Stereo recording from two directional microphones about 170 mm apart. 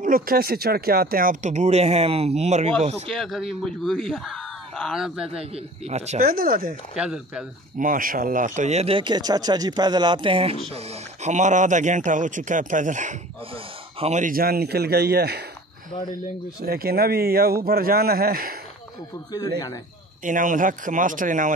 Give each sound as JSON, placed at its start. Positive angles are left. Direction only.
{"t": 0.0, "sound": "speech", "side_deg": -60}
{"t": 3.1, "sound": "speech", "side_deg": 0}
{"t": 5.3, "sound": "speech", "side_deg": -35}
{"t": 6.2, "sound": "speech", "side_deg": -60}
{"t": 7.0, "sound": "speech", "side_deg": -5}
{"t": 7.8, "sound": "speech", "side_deg": -55}
{"t": 11.2, "sound": "a man's voice", "side_deg": -45}
{"t": 16.6, "sound": "speech", "side_deg": -60}
{"t": 20.2, "sound": "speech", "side_deg": -50}